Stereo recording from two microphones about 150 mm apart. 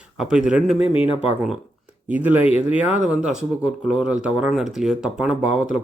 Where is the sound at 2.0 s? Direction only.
10° right (ahead or behind).